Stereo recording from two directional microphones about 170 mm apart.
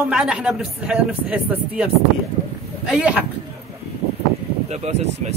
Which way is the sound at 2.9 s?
10° right (ahead or behind).